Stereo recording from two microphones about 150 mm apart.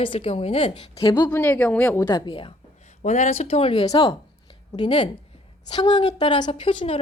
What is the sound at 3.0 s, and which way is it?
A woman's voice, 50° left (ahead or behind).